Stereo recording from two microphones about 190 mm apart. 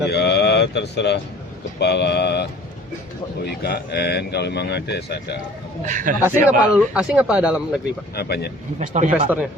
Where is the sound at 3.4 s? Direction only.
60° left (ahead or behind).